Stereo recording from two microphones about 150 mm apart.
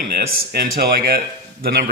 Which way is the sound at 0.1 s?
85° right.